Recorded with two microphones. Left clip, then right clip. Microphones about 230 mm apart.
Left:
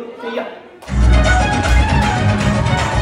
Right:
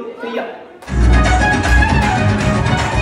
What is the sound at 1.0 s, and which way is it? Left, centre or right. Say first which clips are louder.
Music: right 1 dB; centre.